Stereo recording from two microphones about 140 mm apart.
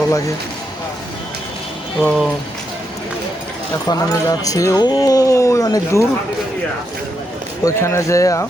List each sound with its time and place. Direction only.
2.0 s speech: centre (ahead or behind)
3.8 s speech: 25° left (ahead or behind)
7.6 s speech: 20° left (ahead or behind)